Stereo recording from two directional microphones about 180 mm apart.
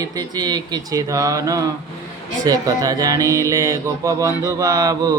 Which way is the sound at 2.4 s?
20° right (ahead or behind).